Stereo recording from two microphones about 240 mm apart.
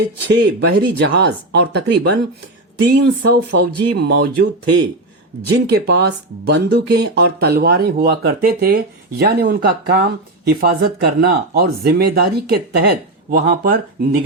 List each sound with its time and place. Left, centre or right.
0.3 s speech: right
5.5 s speech: right